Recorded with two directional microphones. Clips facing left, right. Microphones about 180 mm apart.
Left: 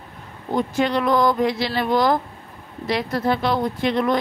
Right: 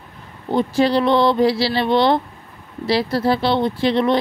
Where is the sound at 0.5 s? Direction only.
30° right (ahead or behind).